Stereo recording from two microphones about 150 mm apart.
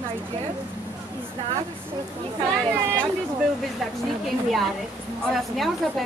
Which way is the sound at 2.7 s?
15° right (ahead or behind).